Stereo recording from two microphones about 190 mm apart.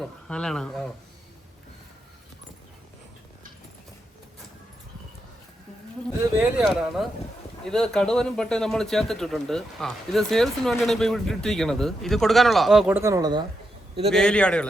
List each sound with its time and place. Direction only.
0.0 s speech: 5° left (ahead or behind)
6.6 s a man's voice: centre (ahead or behind)
13.0 s speech: 15° right (ahead or behind)
14.1 s a man's voice: 5° left (ahead or behind)